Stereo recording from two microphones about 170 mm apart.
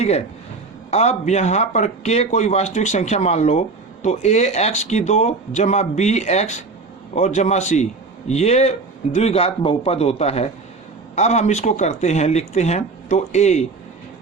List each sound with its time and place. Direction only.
0.9 s a man's voice: 40° left (ahead or behind)